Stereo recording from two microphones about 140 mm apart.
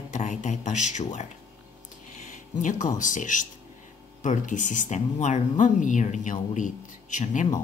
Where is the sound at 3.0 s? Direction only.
65° left (ahead or behind).